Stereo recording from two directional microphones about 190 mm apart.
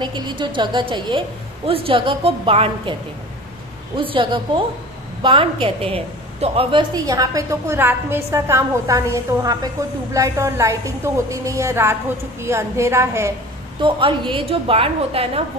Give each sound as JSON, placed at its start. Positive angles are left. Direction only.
{"t": 0.0, "sound": "a woman's voice", "side_deg": -25}
{"t": 13.7, "sound": "a woman's voice", "side_deg": -25}